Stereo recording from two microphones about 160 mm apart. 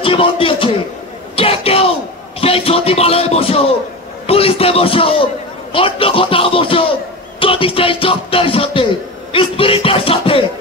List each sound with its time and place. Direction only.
0.0 s a man's voice: 35° left (ahead or behind)
1.3 s bellow: 35° left (ahead or behind)
2.4 s a man's voice: 35° left (ahead or behind)